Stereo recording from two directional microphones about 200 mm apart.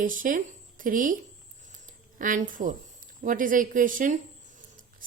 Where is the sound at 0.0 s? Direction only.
40° right (ahead or behind).